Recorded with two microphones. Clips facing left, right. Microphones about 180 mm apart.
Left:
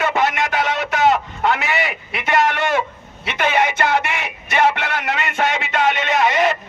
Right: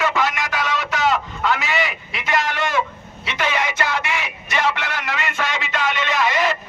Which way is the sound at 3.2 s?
60° left (ahead or behind).